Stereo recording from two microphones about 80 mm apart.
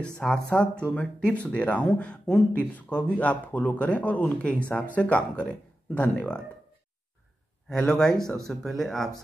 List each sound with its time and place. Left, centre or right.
0.2 s speech: centre
7.7 s speech: centre